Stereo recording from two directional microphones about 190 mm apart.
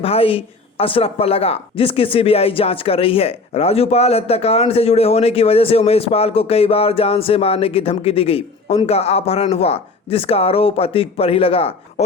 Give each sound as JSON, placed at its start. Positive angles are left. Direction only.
{"t": 0.0, "sound": "a woman's voice", "side_deg": 30}